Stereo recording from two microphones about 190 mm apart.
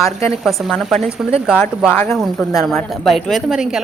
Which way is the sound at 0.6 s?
Centre (ahead or behind).